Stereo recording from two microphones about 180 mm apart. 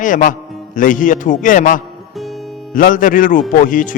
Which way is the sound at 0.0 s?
45° left (ahead or behind).